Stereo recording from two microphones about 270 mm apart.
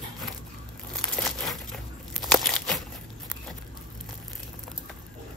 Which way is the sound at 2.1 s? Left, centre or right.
Centre.